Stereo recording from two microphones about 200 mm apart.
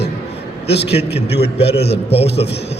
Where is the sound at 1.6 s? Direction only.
30° left (ahead or behind).